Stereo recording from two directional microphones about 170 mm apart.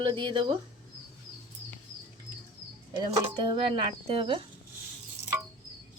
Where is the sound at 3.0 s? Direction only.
25° right (ahead or behind).